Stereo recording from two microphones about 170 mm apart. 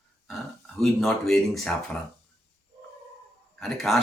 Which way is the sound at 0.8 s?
Centre (ahead or behind).